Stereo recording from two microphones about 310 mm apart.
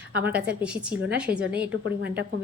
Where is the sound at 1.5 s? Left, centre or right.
Right.